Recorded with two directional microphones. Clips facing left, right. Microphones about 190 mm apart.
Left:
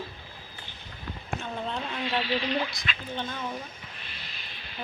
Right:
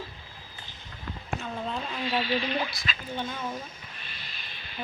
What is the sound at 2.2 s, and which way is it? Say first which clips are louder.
Speech: right 1 dB; 45° right (ahead or behind).